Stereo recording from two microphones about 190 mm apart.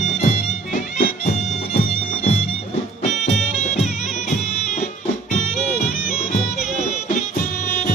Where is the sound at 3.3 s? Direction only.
Centre (ahead or behind).